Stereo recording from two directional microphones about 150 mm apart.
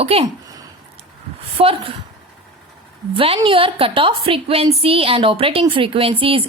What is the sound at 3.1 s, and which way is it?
A woman's voice, 35° right (ahead or behind).